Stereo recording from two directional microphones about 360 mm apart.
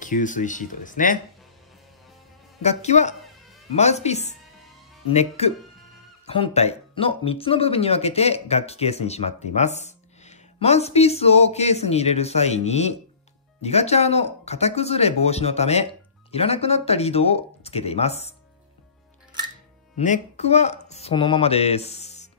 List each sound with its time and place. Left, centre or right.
0.0 s speech: left
2.6 s speech: centre
20.0 s speech: centre